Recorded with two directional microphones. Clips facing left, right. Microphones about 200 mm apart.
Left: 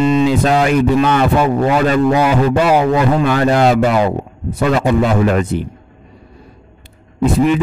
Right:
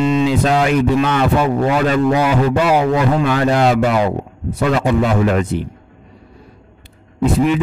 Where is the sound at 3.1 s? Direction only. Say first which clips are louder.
Left 2 dB; 45° left (ahead or behind).